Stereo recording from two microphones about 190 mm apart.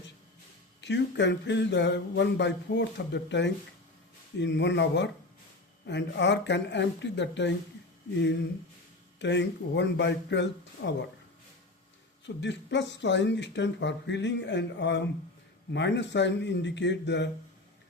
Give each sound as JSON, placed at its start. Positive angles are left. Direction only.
{"t": 0.8, "sound": "speech", "side_deg": 65}
{"t": 9.1, "sound": "speech", "side_deg": 70}
{"t": 12.2, "sound": "speech", "side_deg": 70}